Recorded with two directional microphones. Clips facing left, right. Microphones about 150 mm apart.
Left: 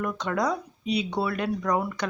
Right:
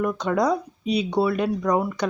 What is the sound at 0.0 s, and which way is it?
Speech, 15° right (ahead or behind).